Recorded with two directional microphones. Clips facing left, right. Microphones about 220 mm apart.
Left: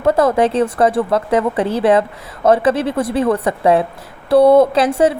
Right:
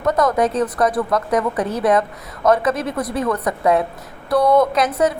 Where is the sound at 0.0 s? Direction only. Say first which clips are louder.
Left 4 dB; 30° left (ahead or behind).